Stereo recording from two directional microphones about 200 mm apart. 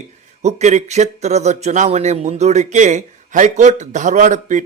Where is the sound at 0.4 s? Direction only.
35° right (ahead or behind).